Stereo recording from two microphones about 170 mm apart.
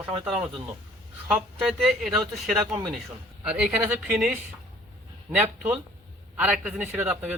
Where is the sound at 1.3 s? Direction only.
5° right (ahead or behind).